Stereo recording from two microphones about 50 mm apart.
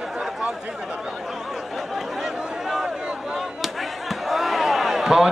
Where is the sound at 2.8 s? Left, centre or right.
Centre.